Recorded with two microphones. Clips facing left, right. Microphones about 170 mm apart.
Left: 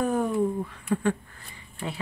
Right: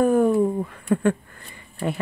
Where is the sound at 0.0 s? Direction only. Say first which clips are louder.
Right 7 dB; 50° right (ahead or behind).